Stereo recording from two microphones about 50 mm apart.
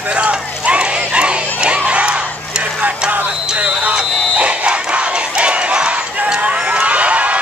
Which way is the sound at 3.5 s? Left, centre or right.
Right.